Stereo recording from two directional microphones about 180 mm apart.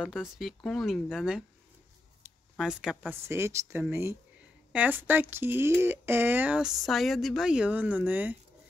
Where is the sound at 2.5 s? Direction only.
5° right (ahead or behind).